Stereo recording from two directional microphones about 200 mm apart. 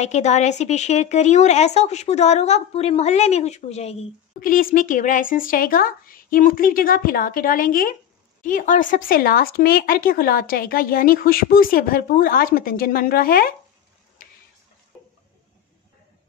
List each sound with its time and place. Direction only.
0.0 s speech: 35° left (ahead or behind)
4.4 s speech: 45° left (ahead or behind)